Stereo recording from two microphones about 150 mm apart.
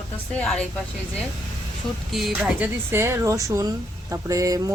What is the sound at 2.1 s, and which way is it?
Speech, centre (ahead or behind).